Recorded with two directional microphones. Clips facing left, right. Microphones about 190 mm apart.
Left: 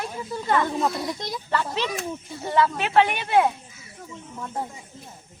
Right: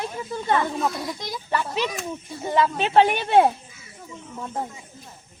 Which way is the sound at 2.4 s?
20° right (ahead or behind).